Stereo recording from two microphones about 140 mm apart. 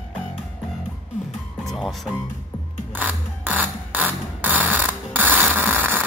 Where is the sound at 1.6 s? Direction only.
Centre (ahead or behind).